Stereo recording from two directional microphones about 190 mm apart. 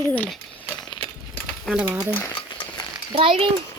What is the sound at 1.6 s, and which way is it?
Speech, 5° right (ahead or behind).